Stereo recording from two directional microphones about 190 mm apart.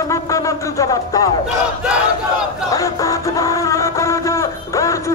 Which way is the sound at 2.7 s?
15° left (ahead or behind).